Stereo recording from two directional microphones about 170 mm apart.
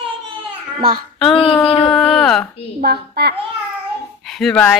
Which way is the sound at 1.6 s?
30° left (ahead or behind).